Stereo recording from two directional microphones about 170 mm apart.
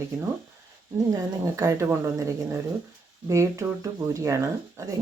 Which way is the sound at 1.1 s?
20° right (ahead or behind).